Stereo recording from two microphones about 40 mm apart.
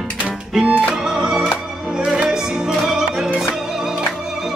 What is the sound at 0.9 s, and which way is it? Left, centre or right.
Music, centre.